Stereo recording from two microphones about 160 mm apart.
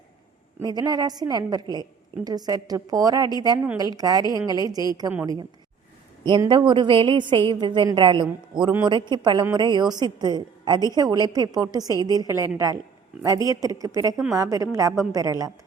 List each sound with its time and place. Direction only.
0.6 s a woman's voice: 25° right (ahead or behind)